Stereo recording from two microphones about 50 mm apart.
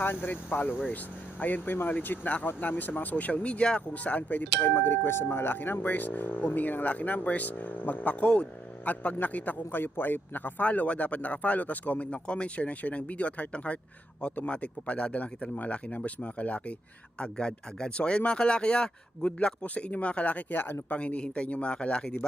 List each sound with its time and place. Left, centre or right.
0.0 s a man's voice: left; by 22.3 s centre